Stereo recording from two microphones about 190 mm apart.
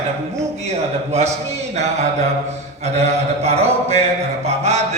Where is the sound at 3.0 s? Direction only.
35° right (ahead or behind).